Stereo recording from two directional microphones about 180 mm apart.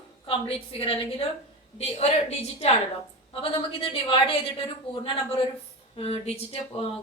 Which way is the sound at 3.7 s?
30° left (ahead or behind).